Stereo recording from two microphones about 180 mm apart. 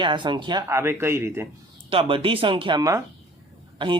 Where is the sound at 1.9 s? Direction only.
30° right (ahead or behind).